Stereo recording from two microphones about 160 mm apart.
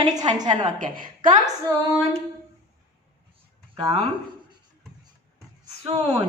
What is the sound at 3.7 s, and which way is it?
Speech, 35° right (ahead or behind).